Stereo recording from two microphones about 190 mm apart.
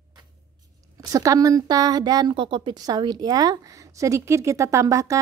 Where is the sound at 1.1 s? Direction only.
15° right (ahead or behind).